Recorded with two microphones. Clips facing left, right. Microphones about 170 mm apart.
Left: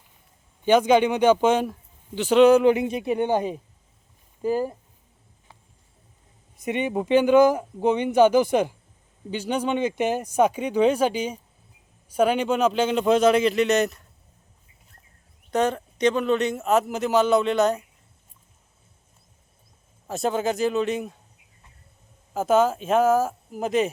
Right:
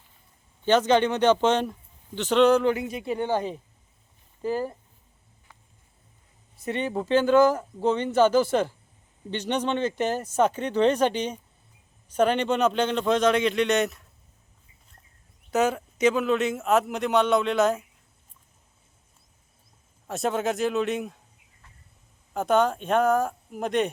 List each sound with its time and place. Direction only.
0.6 s speech: 10° left (ahead or behind)
6.6 s a man's voice: 15° left (ahead or behind); by 14.1 s centre (ahead or behind)
15.4 s a man's voice: 5° right (ahead or behind)
20.1 s a man's voice: centre (ahead or behind)
22.3 s a man's voice: 5° left (ahead or behind)